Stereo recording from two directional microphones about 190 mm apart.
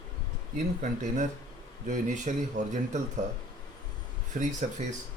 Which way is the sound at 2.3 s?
40° right (ahead or behind).